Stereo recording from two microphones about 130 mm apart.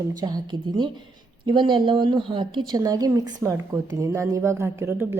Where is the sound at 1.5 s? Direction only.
40° right (ahead or behind); by 5.0 s 20° right (ahead or behind).